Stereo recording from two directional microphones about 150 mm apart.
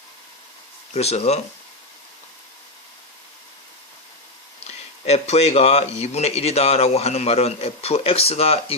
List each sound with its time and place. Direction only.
0.9 s a man's voice: 45° left (ahead or behind)
4.6 s a man's voice: 45° left (ahead or behind)